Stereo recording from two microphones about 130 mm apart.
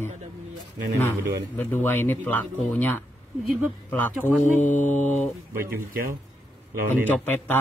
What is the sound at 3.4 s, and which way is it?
Speech, centre (ahead or behind).